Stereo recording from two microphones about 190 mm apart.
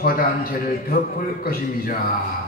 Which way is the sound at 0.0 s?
50° left (ahead or behind).